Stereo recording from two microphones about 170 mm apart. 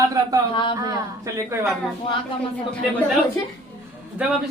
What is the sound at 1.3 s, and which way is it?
Speech, 15° right (ahead or behind).